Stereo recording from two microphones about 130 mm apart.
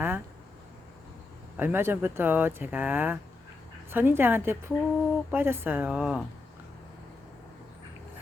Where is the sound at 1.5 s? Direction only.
15° right (ahead or behind).